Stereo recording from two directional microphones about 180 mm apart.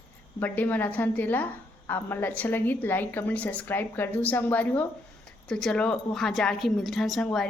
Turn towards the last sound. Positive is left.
turn(degrees=5)  # may be behind; listen again after turning